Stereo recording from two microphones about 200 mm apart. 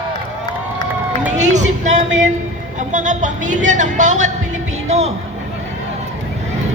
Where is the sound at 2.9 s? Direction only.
40° right (ahead or behind).